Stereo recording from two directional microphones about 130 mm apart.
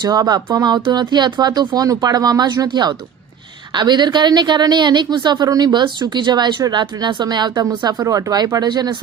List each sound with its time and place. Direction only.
0.0 s speech: 30° right (ahead or behind)